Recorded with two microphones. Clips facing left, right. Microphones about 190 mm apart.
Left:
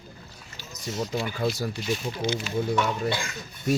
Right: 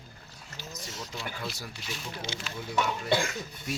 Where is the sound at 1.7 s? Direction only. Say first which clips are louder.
Left 12 dB; centre (ahead or behind).